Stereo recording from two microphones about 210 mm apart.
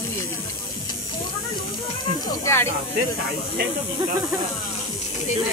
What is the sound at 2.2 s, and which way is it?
Speech, 15° left (ahead or behind).